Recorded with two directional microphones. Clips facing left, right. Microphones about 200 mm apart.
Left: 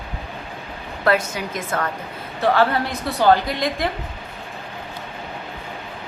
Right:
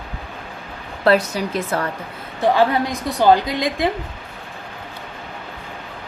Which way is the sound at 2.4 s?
15° right (ahead or behind).